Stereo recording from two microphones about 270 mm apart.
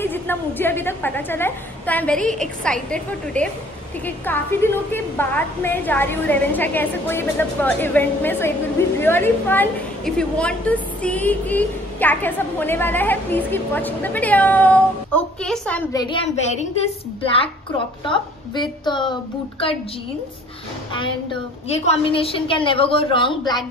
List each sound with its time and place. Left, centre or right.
0.0 s a woman's voice: centre
21.6 s a woman's voice: left